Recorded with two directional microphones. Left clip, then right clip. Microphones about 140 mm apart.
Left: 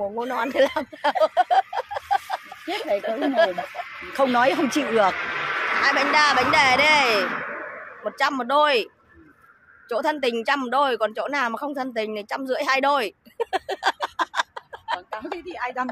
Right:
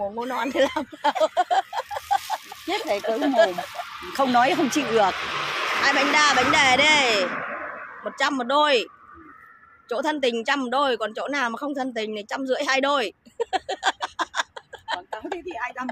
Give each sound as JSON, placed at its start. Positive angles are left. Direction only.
{"t": 0.2, "sound": "a sound", "side_deg": 5}
{"t": 3.1, "sound": "speech", "side_deg": 0}
{"t": 4.3, "sound": "speech", "side_deg": 30}
{"t": 5.1, "sound": "a sound", "side_deg": -20}
{"t": 5.8, "sound": "a woman's voice", "side_deg": -5}
{"t": 9.8, "sound": "a woman's voice", "side_deg": 5}
{"t": 15.5, "sound": "speech", "side_deg": 40}